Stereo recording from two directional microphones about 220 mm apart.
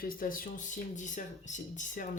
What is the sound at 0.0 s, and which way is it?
Speech, 40° left (ahead or behind).